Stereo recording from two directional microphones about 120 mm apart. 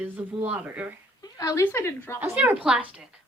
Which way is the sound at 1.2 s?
30° left (ahead or behind).